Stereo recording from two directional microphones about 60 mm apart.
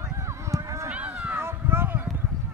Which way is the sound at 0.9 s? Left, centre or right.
Right.